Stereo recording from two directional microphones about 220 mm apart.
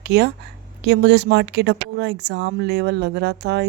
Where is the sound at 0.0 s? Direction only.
50° right (ahead or behind).